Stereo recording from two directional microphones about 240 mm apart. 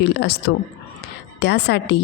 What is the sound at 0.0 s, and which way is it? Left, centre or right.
Speech, left.